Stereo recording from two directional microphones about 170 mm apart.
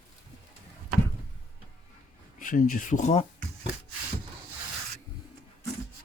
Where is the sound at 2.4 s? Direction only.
50° left (ahead or behind).